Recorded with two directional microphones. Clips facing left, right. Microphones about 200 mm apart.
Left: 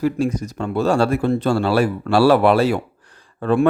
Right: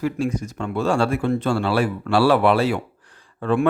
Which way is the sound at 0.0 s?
40° left (ahead or behind).